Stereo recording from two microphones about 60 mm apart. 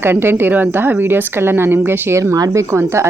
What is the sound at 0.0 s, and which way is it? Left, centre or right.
A woman's voice, right.